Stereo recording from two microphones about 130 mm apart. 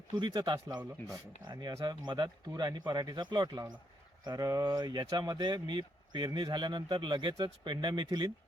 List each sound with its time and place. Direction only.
0.1 s speech: 30° right (ahead or behind)